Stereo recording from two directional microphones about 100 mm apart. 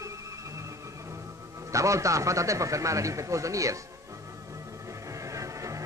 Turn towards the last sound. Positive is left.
turn(degrees=-30)  # may be behind; listen again after turning